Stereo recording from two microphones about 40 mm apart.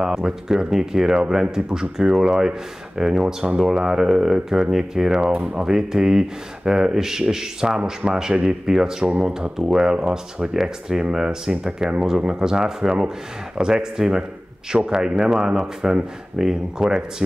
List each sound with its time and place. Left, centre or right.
0.0 s speech: centre
5.3 s speech: right
5.7 s speech: centre
9.0 s speech: right